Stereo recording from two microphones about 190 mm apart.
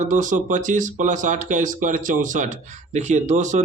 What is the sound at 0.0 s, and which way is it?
Speech, 40° right (ahead or behind).